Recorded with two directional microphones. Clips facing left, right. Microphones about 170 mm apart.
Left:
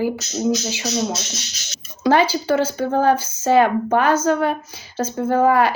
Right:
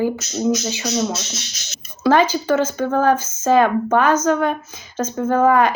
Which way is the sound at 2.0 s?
10° left (ahead or behind).